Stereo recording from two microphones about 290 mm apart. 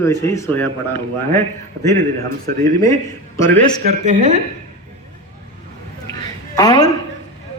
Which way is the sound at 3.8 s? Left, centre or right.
Right.